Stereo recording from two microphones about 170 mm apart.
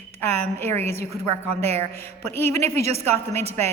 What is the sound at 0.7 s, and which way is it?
Speech, 40° right (ahead or behind).